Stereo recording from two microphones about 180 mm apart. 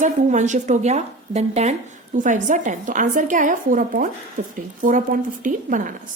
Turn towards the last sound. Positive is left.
turn(degrees=-45)  # may be behind; listen again after turning